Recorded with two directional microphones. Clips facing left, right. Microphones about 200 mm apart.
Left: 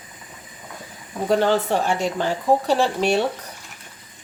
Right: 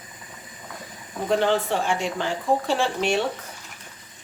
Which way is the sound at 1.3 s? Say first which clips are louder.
Left 3 dB; 40° left (ahead or behind).